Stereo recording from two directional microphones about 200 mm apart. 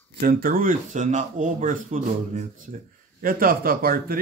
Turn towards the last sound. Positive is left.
turn(degrees=-45)  # may be behind; listen again after turning